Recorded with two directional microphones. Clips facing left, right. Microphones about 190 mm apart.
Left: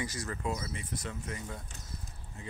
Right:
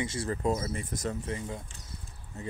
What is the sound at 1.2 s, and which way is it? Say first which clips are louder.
Speech: right 5 dB; 25° right (ahead or behind).